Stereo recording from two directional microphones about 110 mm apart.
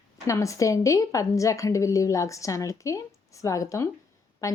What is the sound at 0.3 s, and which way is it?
Speech, 30° left (ahead or behind).